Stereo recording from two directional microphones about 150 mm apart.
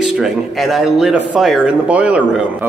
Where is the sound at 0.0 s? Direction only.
Centre (ahead or behind).